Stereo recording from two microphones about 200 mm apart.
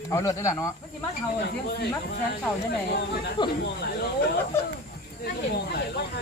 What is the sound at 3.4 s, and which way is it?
Speech, 25° left (ahead or behind).